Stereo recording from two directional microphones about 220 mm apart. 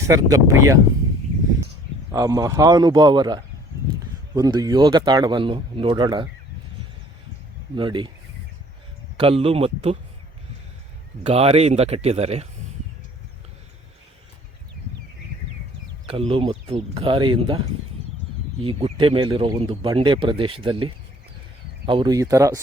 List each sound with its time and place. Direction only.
0.0 s speech: 15° right (ahead or behind)
2.1 s speech: 15° right (ahead or behind)
7.8 s speech: 20° right (ahead or behind)
9.1 s speech: 25° right (ahead or behind)
11.2 s speech: 25° right (ahead or behind)
16.1 s speech: 25° right (ahead or behind)
18.6 s speech: 25° right (ahead or behind)